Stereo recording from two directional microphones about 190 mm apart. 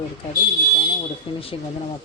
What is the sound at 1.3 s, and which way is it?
Speech, 30° left (ahead or behind).